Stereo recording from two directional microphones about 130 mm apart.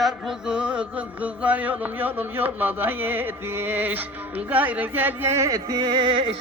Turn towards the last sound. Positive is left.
turn(degrees=-45)  # may be behind; listen again after turning